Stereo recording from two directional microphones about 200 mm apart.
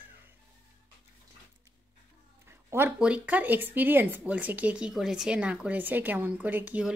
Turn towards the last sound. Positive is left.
turn(degrees=-5)  # may be behind; listen again after turning